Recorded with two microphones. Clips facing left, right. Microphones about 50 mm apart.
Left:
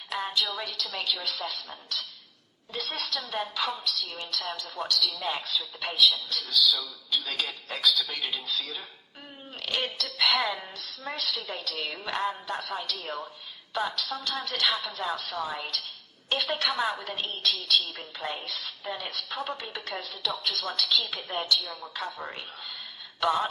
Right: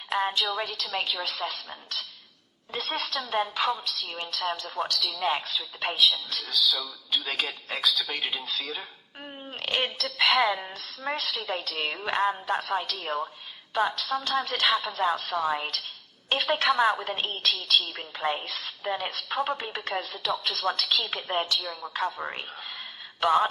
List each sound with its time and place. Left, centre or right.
0.1 s a woman's voice: right
2.7 s a woman's voice: right
21.7 s speech: centre
21.9 s a woman's voice: right